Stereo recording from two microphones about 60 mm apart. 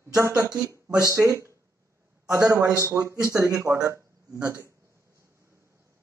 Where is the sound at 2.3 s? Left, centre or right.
Right.